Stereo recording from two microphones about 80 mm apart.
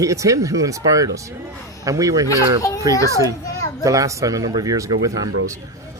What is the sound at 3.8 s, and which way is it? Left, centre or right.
Speech, right.